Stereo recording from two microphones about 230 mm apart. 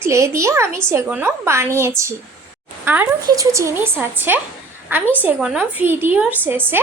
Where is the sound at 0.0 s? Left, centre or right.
Centre.